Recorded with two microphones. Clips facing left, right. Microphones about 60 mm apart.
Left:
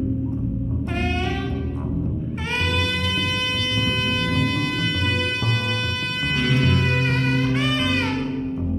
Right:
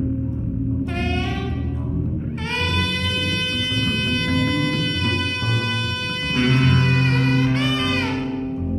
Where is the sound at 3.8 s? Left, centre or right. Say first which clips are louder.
Right 2 dB; centre.